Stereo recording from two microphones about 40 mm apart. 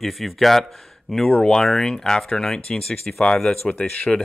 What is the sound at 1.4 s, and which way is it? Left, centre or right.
Speech, centre.